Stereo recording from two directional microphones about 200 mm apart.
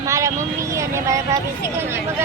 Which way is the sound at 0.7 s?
15° right (ahead or behind).